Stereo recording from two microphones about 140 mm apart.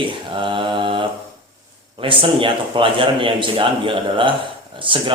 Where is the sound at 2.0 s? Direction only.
40° right (ahead or behind).